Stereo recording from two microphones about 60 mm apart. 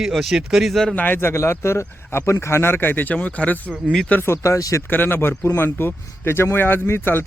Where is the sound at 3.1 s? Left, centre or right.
Left.